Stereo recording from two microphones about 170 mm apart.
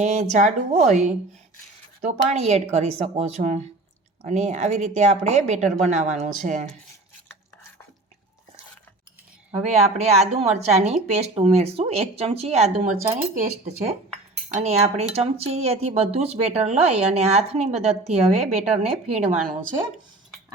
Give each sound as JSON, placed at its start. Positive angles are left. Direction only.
{"t": 0.0, "sound": "a woman's voice", "side_deg": -45}
{"t": 9.7, "sound": "a woman's voice", "side_deg": -40}